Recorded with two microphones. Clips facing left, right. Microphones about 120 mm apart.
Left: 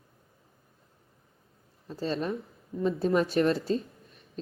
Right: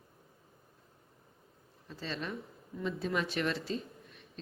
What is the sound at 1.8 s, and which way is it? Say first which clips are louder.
Speech: left 9 dB; 40° left (ahead or behind).